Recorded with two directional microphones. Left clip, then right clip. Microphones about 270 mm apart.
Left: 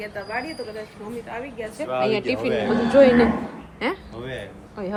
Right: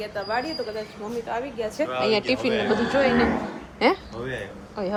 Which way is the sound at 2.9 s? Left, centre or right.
Centre.